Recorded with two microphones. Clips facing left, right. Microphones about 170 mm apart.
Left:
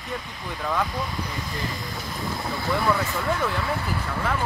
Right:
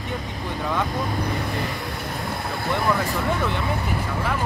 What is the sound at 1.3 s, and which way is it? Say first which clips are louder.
Speech: right 5 dB; 60° right (ahead or behind).